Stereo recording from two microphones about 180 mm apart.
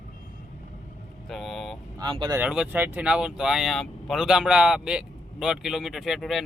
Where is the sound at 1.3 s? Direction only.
Centre (ahead or behind).